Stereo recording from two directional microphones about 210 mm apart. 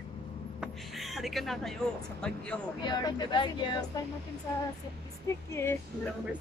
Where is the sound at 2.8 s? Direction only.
20° left (ahead or behind).